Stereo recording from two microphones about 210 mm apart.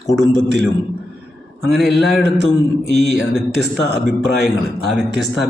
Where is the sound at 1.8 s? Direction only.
Centre (ahead or behind).